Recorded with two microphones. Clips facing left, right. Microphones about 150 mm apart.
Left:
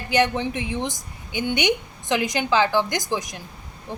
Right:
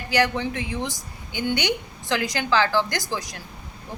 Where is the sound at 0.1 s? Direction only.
20° left (ahead or behind).